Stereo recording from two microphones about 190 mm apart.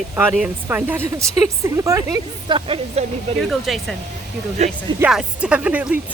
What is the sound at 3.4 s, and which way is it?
Speech, centre (ahead or behind).